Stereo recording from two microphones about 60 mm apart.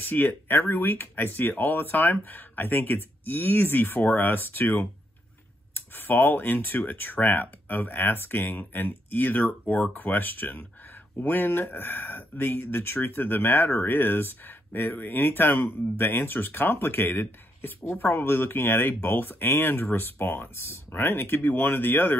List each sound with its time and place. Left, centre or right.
0.0 s speech: left